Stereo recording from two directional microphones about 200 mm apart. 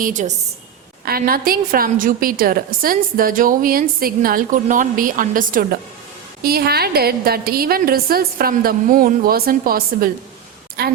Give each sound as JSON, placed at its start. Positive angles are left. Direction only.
{"t": 0.0, "sound": "a woman's voice", "side_deg": -40}